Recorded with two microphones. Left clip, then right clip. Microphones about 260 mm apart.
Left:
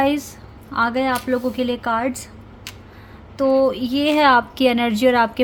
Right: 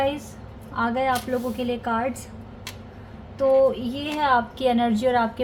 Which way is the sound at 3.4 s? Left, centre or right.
Left.